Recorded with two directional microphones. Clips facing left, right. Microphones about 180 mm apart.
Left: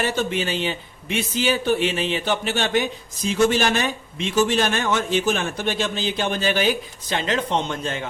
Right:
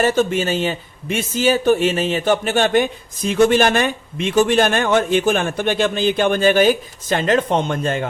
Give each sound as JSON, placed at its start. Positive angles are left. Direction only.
{"t": 0.0, "sound": "a man's voice", "side_deg": -45}